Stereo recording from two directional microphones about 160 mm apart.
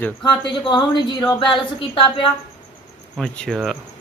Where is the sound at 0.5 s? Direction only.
30° left (ahead or behind).